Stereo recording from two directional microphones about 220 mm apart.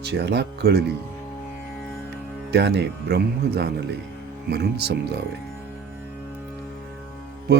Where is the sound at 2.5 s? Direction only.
50° right (ahead or behind).